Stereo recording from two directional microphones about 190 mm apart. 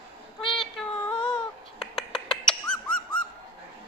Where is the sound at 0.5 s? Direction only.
Centre (ahead or behind).